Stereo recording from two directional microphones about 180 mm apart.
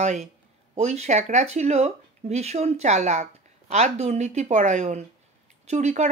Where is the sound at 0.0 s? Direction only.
40° right (ahead or behind).